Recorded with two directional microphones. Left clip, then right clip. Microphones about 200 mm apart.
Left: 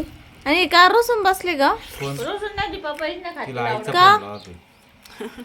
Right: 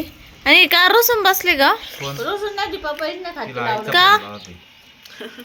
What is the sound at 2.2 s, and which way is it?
A woman's voice, 55° right (ahead or behind).